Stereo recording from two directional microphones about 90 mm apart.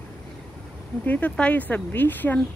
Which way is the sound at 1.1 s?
20° left (ahead or behind).